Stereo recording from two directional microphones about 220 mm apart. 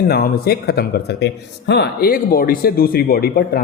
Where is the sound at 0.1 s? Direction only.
45° left (ahead or behind).